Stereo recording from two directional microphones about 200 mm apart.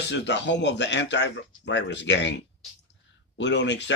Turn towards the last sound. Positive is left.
turn(degrees=60)  # may be behind; listen again after turning